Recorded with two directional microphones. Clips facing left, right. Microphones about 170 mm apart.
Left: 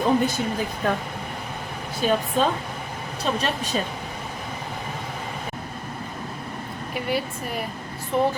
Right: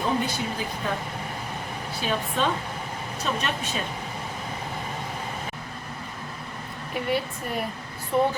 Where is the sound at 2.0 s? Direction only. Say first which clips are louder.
Left 5 dB; 45° left (ahead or behind).